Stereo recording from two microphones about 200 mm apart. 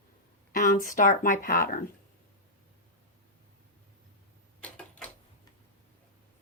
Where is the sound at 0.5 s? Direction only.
45° left (ahead or behind).